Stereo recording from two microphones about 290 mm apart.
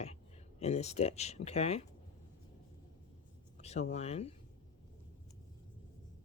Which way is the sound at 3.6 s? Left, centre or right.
Left.